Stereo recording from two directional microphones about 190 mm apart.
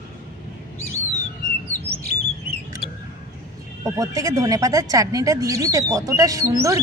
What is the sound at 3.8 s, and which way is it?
Speech, 15° right (ahead or behind).